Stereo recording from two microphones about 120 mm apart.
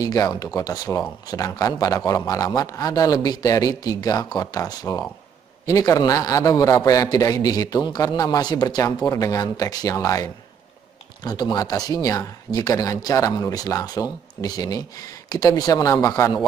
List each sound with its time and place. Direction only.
0.0 s a man's voice: 30° left (ahead or behind)
11.2 s speech: 35° left (ahead or behind)